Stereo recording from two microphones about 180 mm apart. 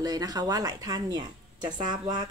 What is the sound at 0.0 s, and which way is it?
Speech, 20° right (ahead or behind).